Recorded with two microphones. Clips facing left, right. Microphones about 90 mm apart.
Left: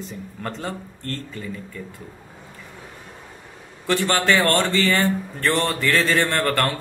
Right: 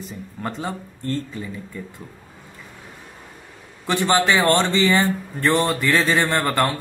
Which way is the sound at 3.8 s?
15° right (ahead or behind).